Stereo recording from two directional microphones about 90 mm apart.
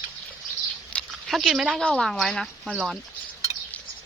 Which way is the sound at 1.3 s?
5° right (ahead or behind).